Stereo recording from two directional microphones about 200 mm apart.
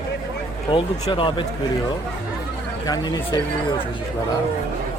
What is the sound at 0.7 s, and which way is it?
Speech, 25° left (ahead or behind).